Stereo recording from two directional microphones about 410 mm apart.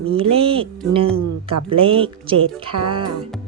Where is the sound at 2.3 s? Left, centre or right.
Right.